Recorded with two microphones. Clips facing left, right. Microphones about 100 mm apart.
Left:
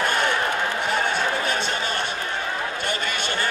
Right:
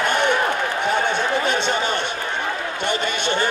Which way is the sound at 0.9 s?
20° right (ahead or behind).